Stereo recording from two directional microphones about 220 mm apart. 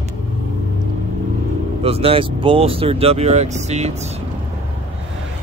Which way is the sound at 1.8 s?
25° right (ahead or behind).